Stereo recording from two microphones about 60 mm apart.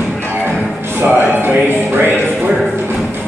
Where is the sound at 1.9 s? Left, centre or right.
Right.